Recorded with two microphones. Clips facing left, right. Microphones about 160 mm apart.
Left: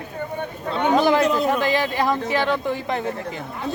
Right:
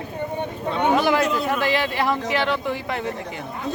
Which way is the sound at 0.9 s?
25° left (ahead or behind).